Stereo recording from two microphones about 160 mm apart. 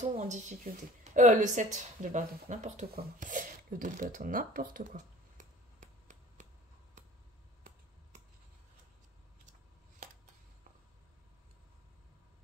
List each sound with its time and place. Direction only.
0.0 s speech: 45° right (ahead or behind)
5.8 s finger snapping: 50° right (ahead or behind)